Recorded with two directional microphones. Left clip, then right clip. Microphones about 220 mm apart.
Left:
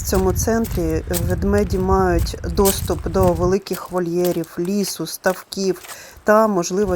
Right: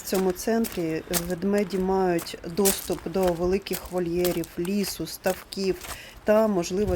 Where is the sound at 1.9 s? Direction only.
5° left (ahead or behind).